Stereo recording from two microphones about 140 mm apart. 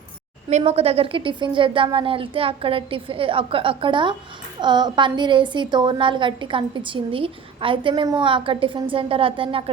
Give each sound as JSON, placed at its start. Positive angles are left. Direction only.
{"t": 0.5, "sound": "a woman's voice", "side_deg": -45}